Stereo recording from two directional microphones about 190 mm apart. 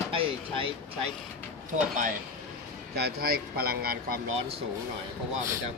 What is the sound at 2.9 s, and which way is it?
Speech, 55° right (ahead or behind).